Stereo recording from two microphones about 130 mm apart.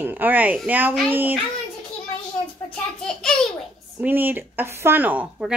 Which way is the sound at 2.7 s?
5° left (ahead or behind).